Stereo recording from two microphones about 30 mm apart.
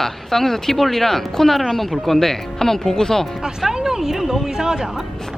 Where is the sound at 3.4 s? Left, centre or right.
Centre.